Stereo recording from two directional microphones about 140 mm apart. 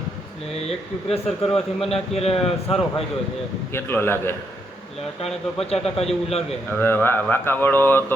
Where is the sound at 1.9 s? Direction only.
45° left (ahead or behind).